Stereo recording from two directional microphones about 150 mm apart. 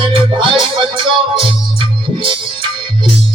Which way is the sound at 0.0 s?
35° right (ahead or behind).